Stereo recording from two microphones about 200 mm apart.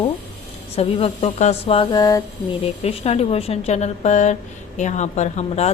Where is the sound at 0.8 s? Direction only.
30° left (ahead or behind).